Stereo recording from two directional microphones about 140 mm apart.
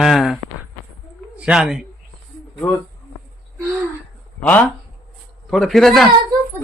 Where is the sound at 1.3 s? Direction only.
10° right (ahead or behind).